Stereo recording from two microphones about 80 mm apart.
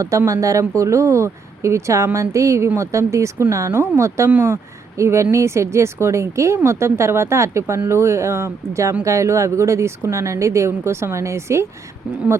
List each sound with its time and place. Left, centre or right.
0.3 s speech: right